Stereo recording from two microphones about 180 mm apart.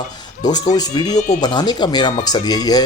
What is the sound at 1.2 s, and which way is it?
Speech, 45° left (ahead or behind).